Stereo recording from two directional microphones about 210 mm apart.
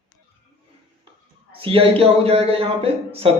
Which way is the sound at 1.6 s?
25° right (ahead or behind).